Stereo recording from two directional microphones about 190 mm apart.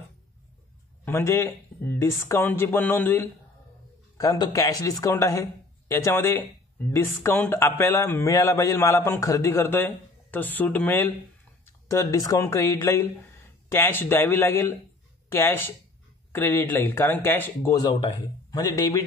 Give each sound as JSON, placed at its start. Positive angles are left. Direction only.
{"t": 1.0, "sound": "speech", "side_deg": 15}